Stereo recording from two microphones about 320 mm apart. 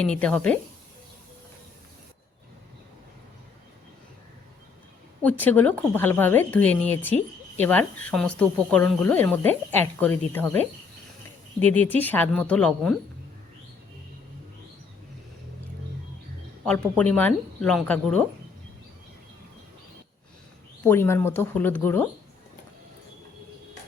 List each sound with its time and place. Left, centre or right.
0.0 s speech: centre
5.2 s speech: centre
11.6 s speech: centre
17.0 s speech: centre
20.8 s speech: centre